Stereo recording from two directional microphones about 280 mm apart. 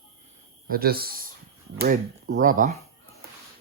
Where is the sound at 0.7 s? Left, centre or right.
Right.